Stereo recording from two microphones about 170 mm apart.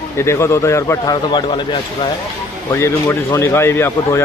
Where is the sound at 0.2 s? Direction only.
15° left (ahead or behind).